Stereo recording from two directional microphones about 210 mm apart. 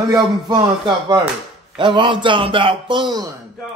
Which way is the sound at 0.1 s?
20° right (ahead or behind).